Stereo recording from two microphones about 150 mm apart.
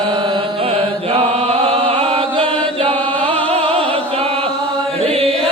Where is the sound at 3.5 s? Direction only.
40° right (ahead or behind).